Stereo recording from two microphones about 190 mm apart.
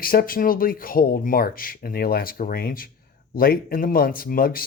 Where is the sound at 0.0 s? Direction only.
50° left (ahead or behind).